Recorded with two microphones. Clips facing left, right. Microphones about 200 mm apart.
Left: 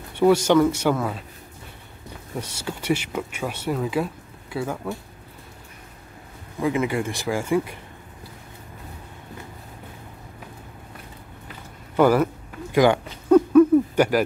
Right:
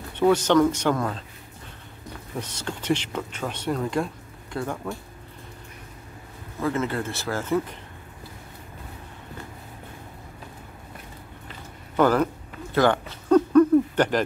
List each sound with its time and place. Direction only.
0.1 s speech: 10° left (ahead or behind)
2.3 s speech: 10° left (ahead or behind)
6.6 s speech: 15° left (ahead or behind)
12.0 s speech: 10° left (ahead or behind)
12.7 s a sound: 15° left (ahead or behind)